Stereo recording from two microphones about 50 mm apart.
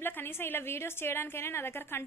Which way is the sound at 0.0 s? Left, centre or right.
Left.